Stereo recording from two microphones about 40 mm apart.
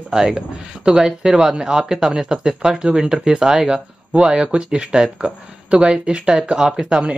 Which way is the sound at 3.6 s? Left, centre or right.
Right.